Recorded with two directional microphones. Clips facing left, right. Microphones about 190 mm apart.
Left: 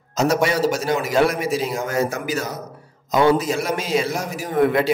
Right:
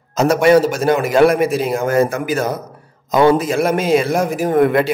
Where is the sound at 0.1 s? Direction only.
55° right (ahead or behind).